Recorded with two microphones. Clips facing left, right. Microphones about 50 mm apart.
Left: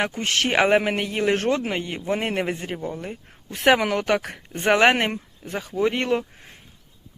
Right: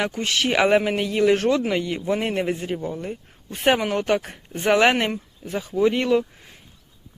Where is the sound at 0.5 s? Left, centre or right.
Left.